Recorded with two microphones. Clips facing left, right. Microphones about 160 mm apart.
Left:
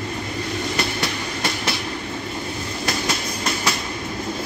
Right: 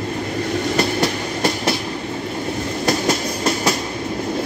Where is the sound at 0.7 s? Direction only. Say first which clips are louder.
Right 6 dB; 40° right (ahead or behind).